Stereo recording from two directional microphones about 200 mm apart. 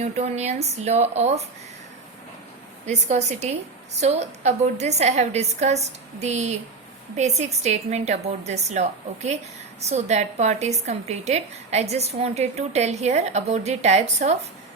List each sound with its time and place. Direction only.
0.0 s a woman's voice: 35° right (ahead or behind)
2.8 s a woman's voice: 35° right (ahead or behind)